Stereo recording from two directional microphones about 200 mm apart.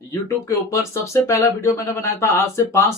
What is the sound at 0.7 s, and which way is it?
Speech, 15° left (ahead or behind).